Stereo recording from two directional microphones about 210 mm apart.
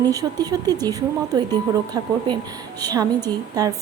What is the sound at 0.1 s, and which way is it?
A woman's voice, 15° right (ahead or behind).